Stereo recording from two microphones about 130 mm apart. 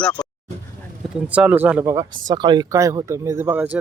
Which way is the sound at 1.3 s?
10° right (ahead or behind).